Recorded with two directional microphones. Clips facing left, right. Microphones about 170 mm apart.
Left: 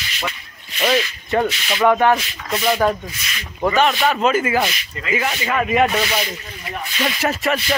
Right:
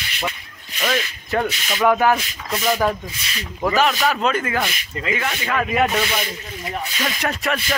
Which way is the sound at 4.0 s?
Centre (ahead or behind).